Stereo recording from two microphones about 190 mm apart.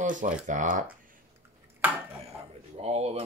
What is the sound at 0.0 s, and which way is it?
Speech, 40° right (ahead or behind).